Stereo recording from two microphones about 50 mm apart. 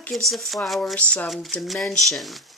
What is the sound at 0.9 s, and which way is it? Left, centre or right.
Speech, centre.